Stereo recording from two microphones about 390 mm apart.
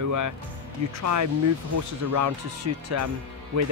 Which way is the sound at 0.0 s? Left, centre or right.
Right.